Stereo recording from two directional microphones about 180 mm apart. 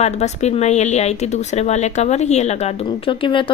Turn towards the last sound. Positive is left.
turn(degrees=30)  # may be behind; listen again after turning